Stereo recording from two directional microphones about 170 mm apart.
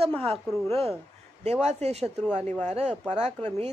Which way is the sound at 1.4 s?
40° right (ahead or behind).